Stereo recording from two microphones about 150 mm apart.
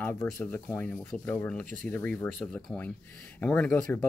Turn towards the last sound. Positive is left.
turn(degrees=10)  # may be behind; listen again after turning